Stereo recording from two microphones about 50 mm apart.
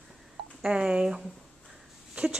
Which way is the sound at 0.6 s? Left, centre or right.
Centre.